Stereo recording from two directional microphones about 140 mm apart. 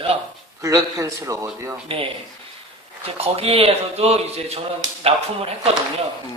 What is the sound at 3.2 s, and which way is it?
A man's voice, 45° right (ahead or behind).